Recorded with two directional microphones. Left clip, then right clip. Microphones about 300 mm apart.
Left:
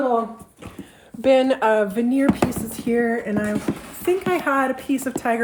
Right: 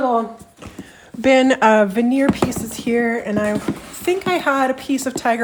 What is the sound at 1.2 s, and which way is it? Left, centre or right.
Speech, right.